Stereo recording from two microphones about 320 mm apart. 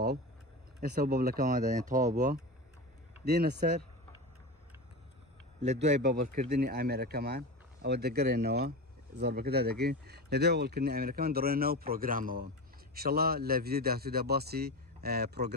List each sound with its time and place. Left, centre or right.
0.7 s speech: right
5.7 s speech: right